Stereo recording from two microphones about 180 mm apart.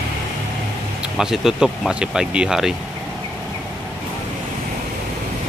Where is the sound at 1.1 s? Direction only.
Centre (ahead or behind).